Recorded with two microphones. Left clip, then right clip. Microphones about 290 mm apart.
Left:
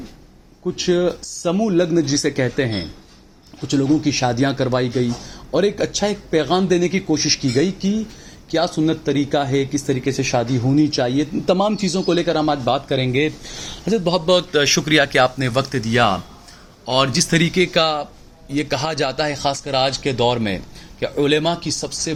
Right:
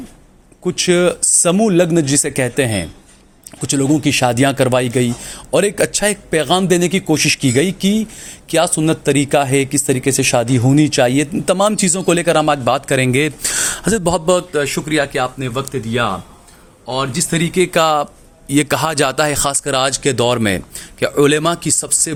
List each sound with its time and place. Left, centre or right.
0.6 s speech: right
14.5 s a man's voice: centre
17.2 s speech: centre
17.7 s speech: right